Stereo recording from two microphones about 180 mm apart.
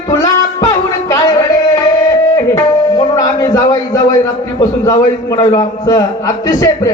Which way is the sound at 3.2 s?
20° left (ahead or behind).